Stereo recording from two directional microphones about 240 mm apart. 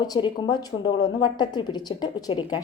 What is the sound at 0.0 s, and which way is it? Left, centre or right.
A woman's voice, centre.